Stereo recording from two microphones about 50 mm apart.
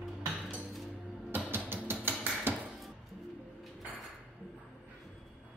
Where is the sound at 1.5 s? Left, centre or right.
Right.